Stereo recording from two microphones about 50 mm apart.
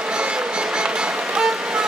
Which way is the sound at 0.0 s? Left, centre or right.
Centre.